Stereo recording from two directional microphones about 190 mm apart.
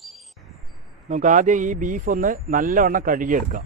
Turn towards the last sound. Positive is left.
turn(degrees=-45)  # may be behind; listen again after turning